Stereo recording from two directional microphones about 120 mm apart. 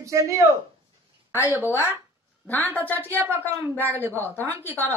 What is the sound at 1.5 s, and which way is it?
Speech, 15° right (ahead or behind).